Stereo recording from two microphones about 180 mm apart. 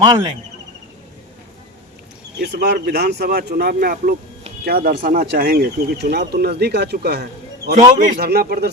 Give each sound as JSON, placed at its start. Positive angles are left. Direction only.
{"t": 0.0, "sound": "speech", "side_deg": -20}
{"t": 2.4, "sound": "speech", "side_deg": -65}